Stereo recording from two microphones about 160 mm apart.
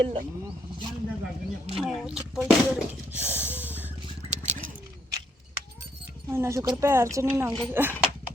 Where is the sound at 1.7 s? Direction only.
Centre (ahead or behind).